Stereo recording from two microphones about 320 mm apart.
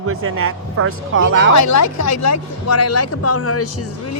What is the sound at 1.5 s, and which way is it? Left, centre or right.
Speech, left.